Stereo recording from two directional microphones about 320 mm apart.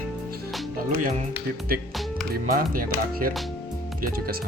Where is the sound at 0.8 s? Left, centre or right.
Right.